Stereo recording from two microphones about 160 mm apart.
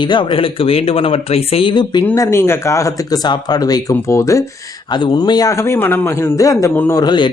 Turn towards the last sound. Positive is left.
turn(degrees=25)  # may be behind; listen again after turning